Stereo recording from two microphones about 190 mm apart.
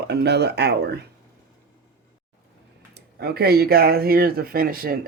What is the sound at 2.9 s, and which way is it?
Speech, 55° right (ahead or behind).